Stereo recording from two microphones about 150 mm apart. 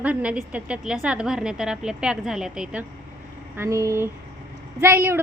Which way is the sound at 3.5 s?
20° right (ahead or behind).